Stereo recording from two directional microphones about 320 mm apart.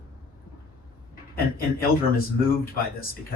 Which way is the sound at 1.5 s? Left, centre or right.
Left.